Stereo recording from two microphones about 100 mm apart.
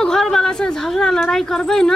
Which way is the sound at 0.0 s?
5° left (ahead or behind).